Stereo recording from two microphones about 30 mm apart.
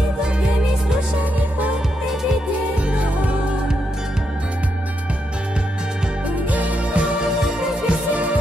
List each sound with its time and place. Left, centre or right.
6.5 s music: right